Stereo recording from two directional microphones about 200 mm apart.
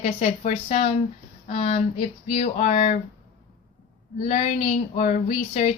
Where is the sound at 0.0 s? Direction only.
35° left (ahead or behind).